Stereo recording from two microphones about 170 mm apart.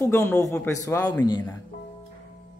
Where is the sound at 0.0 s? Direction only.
15° left (ahead or behind).